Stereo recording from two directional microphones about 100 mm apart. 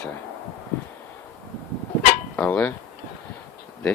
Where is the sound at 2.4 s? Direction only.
15° left (ahead or behind).